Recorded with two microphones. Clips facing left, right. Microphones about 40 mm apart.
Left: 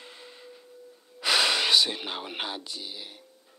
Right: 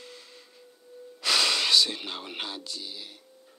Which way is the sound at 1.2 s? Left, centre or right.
Centre.